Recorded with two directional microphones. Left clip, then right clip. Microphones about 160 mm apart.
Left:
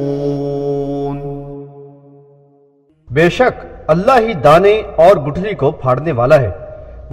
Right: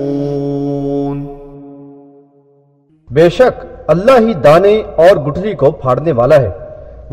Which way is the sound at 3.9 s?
45° right (ahead or behind).